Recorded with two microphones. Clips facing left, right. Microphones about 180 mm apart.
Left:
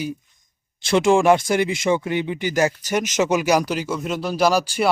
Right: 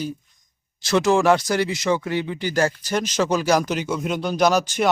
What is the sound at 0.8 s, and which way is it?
Speech, 25° left (ahead or behind).